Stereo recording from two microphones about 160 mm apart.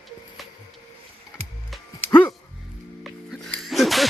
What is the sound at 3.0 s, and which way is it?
Music, centre (ahead or behind).